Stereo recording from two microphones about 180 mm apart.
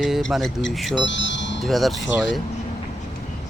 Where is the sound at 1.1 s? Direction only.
90° left.